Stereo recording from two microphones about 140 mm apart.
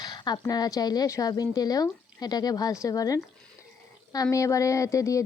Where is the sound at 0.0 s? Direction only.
30° left (ahead or behind).